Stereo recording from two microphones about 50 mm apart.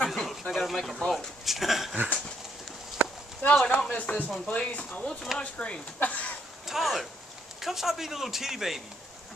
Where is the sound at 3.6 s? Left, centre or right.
Centre.